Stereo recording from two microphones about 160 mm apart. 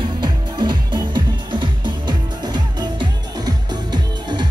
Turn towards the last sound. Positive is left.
turn(degrees=-25)  # may be behind; listen again after turning